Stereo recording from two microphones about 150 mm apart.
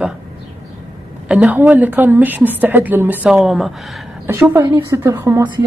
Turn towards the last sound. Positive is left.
turn(degrees=-20)  # may be behind; listen again after turning